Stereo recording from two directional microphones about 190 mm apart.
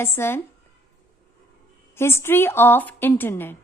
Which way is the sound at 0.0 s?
10° left (ahead or behind).